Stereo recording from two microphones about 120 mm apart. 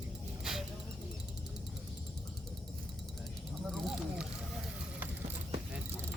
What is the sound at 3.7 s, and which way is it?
Vehicle, 5° right (ahead or behind).